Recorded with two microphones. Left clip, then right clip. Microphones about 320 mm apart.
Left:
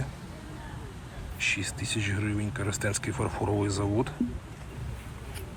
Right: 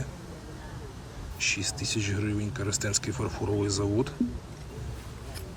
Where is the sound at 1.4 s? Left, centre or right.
Right.